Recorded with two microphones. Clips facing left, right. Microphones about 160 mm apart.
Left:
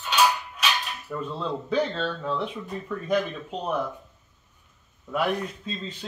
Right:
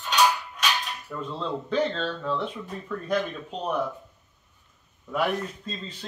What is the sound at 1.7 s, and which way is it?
A man's voice, 5° left (ahead or behind).